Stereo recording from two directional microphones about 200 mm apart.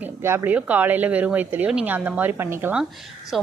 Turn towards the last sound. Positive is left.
turn(degrees=0)  # may be behind; listen again after turning